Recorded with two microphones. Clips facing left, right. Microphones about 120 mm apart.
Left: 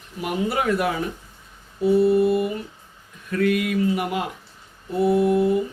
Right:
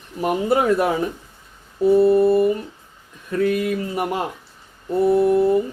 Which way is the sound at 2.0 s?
45° right (ahead or behind).